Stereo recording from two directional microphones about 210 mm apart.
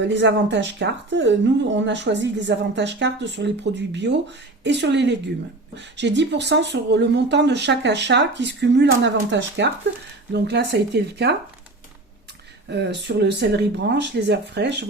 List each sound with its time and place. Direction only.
0.1 s speech: 55° right (ahead or behind)
12.7 s speech: 55° right (ahead or behind)